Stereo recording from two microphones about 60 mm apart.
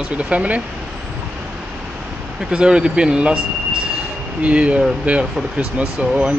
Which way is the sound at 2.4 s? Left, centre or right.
Centre.